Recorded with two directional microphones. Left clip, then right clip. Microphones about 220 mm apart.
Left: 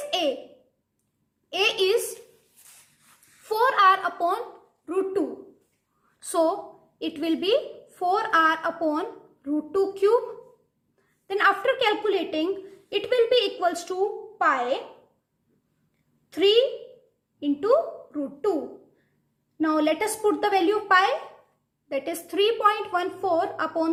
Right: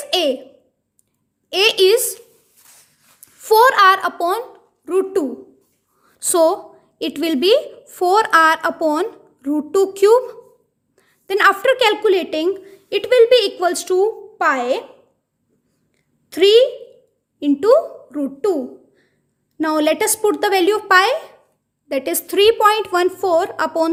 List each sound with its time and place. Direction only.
0.1 s a child's voice: 45° right (ahead or behind)
1.5 s a woman's voice: 45° right (ahead or behind)
3.5 s a woman's voice: 50° right (ahead or behind)
6.3 s a woman's voice: 45° right (ahead or behind)
16.3 s a woman's voice: 45° right (ahead or behind)
19.5 s a woman's voice: 45° right (ahead or behind)